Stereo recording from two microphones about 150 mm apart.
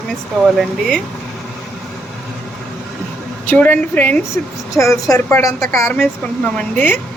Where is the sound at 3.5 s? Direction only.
15° left (ahead or behind).